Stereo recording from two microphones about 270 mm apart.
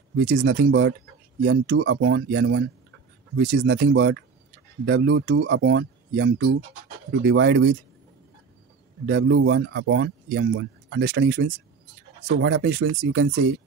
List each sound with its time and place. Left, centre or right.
0.1 s speech: right
9.0 s speech: right